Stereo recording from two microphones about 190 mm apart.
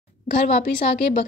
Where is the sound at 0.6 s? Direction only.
45° left (ahead or behind).